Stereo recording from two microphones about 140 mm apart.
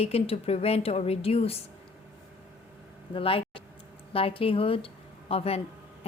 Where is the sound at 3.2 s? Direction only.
40° left (ahead or behind).